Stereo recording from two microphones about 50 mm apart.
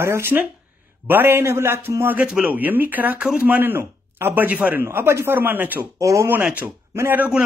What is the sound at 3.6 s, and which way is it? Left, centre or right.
Speech, right.